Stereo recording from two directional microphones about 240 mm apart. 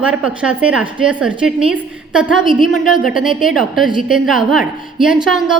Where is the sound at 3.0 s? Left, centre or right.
Centre.